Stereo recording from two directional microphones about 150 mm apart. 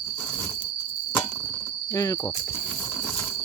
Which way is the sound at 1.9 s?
20° left (ahead or behind).